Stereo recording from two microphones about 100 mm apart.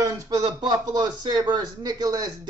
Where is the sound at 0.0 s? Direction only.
40° right (ahead or behind).